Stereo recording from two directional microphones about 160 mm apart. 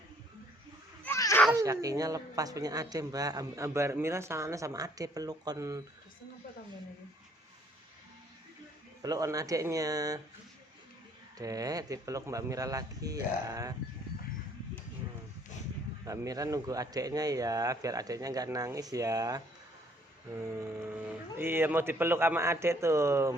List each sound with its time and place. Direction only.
1.0 s children playing: 15° left (ahead or behind)
1.5 s a woman's voice: 20° right (ahead or behind)
9.0 s a woman's voice: 25° right (ahead or behind)
11.3 s a woman's voice: 20° right (ahead or behind)
16.0 s a woman's voice: 20° right (ahead or behind)